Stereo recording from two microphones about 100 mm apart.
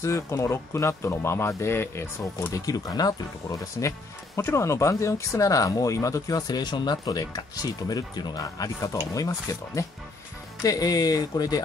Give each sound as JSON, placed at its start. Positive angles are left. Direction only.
{"t": 0.0, "sound": "speech", "side_deg": 30}
{"t": 4.4, "sound": "speech", "side_deg": 25}